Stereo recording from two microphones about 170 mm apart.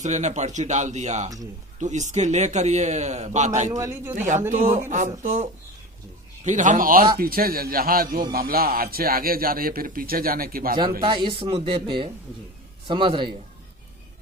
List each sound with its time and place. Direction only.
0.0 s a man's voice: 45° right (ahead or behind)
3.7 s a man's voice: 20° right (ahead or behind)
4.5 s a man's voice: 45° right (ahead or behind)
11.0 s speech: 30° right (ahead or behind)